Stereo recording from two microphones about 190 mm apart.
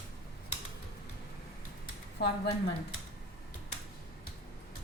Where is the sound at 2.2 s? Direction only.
60° left (ahead or behind).